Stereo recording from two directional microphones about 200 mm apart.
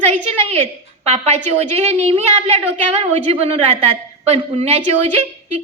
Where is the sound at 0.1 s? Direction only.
30° right (ahead or behind).